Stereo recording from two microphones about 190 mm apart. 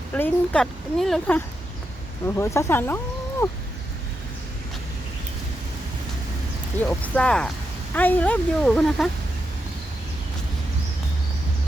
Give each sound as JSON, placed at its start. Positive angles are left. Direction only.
{"t": 0.1, "sound": "a woman's voice", "side_deg": 5}
{"t": 2.2, "sound": "speech", "side_deg": 15}
{"t": 6.7, "sound": "a woman's voice", "side_deg": 10}